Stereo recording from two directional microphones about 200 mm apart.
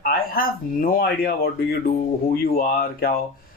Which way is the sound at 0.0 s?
45° left (ahead or behind).